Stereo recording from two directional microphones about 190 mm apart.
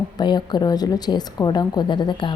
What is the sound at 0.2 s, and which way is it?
A woman's voice, 20° left (ahead or behind).